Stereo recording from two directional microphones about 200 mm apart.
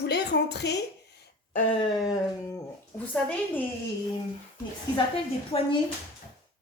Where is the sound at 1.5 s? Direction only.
40° left (ahead or behind).